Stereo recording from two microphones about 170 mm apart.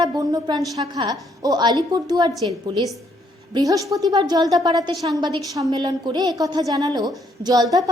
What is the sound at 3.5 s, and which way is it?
A woman's voice, 20° right (ahead or behind).